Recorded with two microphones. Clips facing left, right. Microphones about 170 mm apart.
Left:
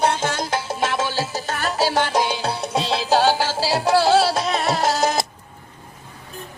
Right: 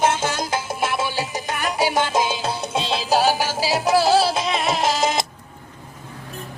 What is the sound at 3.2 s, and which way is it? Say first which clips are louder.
Music: left 1 dB; 15° right (ahead or behind).